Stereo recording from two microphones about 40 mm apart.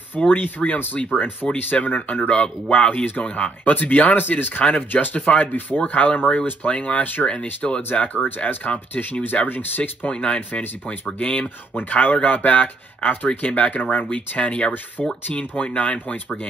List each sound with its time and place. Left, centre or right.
0.3 s speech: left
1.4 s speech: centre
1.8 s speech: left
2.2 s speech: left
4.2 s speech: left
4.9 s speech: left
7.6 s speech: left
8.5 s speech: left
10.1 s speech: left
11.9 s speech: left
15.0 s speech: centre
15.3 s speech: left